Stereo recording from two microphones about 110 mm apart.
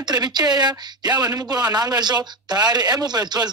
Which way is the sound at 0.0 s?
40° right (ahead or behind).